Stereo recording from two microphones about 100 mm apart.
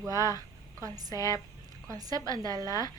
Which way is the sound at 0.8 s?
35° right (ahead or behind).